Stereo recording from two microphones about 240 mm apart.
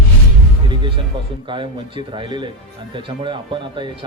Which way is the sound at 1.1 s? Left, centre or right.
Right.